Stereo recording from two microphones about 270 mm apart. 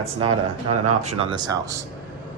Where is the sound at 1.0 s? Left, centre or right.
Right.